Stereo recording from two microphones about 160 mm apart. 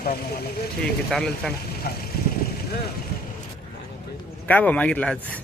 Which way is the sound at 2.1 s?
70° left (ahead or behind).